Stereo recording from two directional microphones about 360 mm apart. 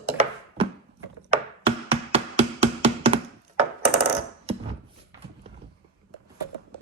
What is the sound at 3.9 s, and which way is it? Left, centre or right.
Coin, right.